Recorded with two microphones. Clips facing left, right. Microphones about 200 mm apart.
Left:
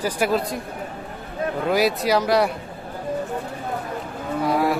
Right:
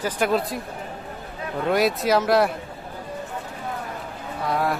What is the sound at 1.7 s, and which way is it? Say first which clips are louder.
Speech: even; centre (ahead or behind).